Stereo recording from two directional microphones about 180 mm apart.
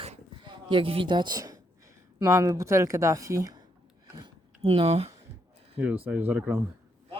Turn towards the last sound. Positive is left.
turn(degrees=-10)  # may be behind; listen again after turning